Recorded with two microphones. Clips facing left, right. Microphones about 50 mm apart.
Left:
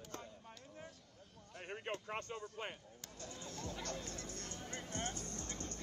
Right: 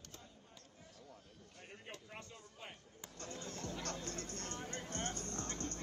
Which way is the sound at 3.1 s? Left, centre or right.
Right.